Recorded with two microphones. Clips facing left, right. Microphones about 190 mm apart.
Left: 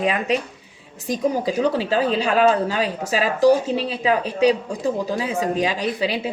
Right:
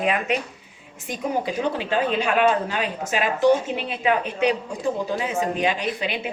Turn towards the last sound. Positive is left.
turn(degrees=35)  # may be behind; listen again after turning